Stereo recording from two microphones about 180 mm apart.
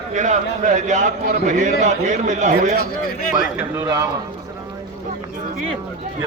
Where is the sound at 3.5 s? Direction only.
15° right (ahead or behind).